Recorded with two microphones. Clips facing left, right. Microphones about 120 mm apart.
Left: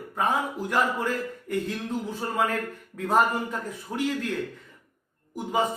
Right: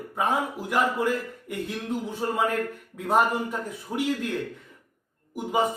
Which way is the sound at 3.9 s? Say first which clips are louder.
Right 1 dB; 5° right (ahead or behind).